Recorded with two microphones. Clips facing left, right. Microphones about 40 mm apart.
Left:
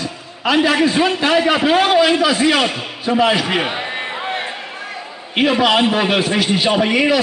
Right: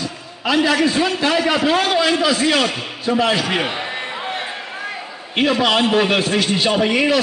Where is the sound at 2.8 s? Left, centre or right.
Centre.